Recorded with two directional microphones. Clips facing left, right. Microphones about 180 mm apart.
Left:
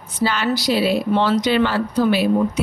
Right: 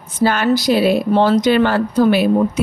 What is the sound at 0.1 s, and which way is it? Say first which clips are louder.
A woman's voice: right 5 dB; 50° right (ahead or behind).